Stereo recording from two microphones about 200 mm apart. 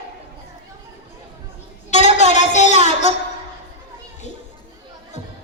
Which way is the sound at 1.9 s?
35° left (ahead or behind).